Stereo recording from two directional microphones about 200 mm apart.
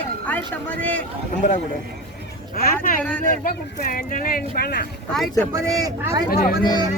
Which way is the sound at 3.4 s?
45° left (ahead or behind).